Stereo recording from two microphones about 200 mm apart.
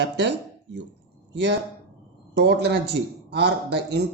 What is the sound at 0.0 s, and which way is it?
A man's voice, 60° right (ahead or behind).